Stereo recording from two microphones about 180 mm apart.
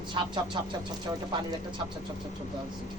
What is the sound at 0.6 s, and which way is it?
Speech, 25° right (ahead or behind).